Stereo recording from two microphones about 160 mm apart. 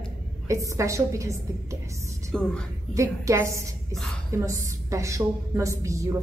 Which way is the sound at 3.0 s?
20° right (ahead or behind).